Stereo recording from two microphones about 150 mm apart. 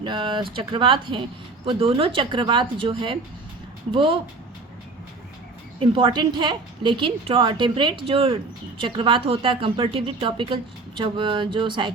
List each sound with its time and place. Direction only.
0.0 s a woman's voice: 35° right (ahead or behind)
5.8 s a woman's voice: 35° right (ahead or behind)